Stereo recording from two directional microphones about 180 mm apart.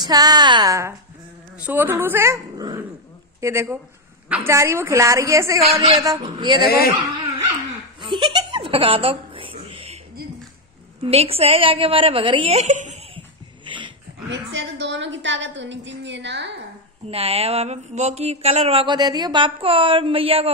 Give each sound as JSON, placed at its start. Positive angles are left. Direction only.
{"t": 0.0, "sound": "a woman's voice", "side_deg": -20}
{"t": 5.6, "sound": "a woman's voice", "side_deg": -30}
{"t": 6.6, "sound": "speech", "side_deg": 60}
{"t": 8.0, "sound": "a sound", "side_deg": -25}
{"t": 11.0, "sound": "speech", "side_deg": -35}
{"t": 13.7, "sound": "dog", "side_deg": -25}
{"t": 14.3, "sound": "a woman's voice", "side_deg": -85}
{"t": 17.1, "sound": "speech", "side_deg": -35}